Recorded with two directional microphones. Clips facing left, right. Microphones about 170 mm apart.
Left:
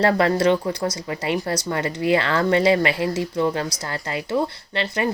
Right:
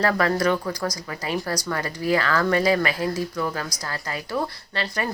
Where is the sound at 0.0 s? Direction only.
25° left (ahead or behind).